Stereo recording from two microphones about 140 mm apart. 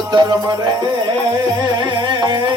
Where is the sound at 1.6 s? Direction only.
35° right (ahead or behind).